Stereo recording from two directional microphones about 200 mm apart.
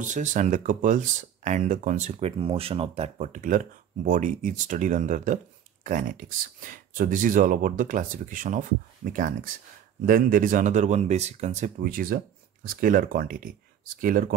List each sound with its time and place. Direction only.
0.0 s speech: 40° right (ahead or behind)